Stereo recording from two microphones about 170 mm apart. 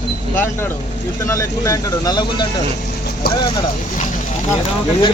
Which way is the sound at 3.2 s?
70° left (ahead or behind).